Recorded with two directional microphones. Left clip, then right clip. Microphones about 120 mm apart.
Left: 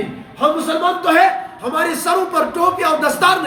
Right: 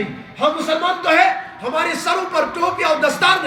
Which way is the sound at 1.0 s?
45° left (ahead or behind).